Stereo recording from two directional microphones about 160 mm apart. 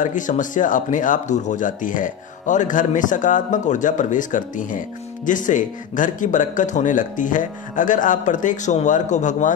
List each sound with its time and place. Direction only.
0.0 s speech: 55° left (ahead or behind)